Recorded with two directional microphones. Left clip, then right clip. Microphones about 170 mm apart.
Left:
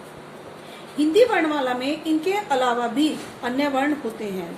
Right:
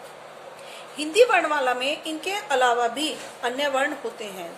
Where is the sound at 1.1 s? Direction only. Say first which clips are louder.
Even; 40° right (ahead or behind).